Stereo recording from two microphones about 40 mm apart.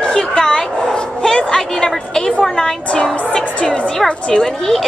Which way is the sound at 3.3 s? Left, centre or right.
Centre.